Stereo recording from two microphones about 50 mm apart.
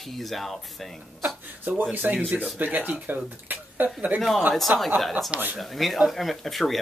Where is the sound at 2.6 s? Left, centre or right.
Right.